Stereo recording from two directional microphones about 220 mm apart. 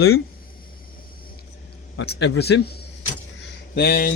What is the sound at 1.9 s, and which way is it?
A man's voice, 50° left (ahead or behind).